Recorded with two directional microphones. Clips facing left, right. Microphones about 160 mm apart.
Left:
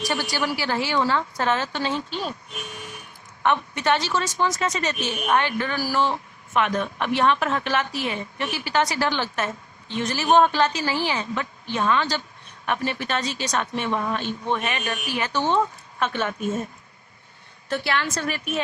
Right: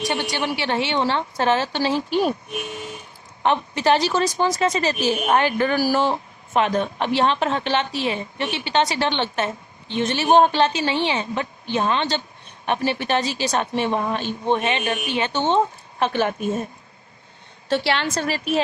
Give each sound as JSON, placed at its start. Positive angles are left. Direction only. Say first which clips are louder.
{"t": 0.0, "sound": "a woman's voice", "louder": "right 2 dB", "side_deg": -20}
{"t": 2.0, "sound": "speech", "louder": "right 9 dB", "side_deg": -15}
{"t": 5.4, "sound": "speech", "louder": "right 6 dB", "side_deg": -15}
{"t": 6.5, "sound": "a woman's voice", "louder": "right 3 dB", "side_deg": -30}
{"t": 17.7, "sound": "a woman's voice", "louder": "right 4 dB", "side_deg": -30}